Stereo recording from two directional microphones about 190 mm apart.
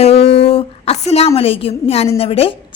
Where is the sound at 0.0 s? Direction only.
30° left (ahead or behind).